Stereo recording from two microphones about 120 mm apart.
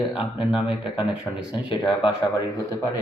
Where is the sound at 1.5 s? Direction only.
40° left (ahead or behind).